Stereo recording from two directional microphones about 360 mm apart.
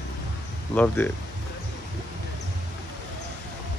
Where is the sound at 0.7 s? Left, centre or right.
Centre.